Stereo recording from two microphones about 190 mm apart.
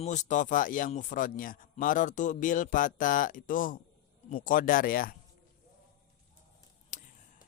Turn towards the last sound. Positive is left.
turn(degrees=40)  # may be behind; listen again after turning